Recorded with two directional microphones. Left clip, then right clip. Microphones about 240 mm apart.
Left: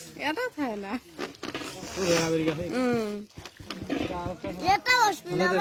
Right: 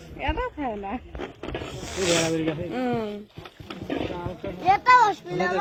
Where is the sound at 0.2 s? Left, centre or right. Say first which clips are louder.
Right 1 dB; left.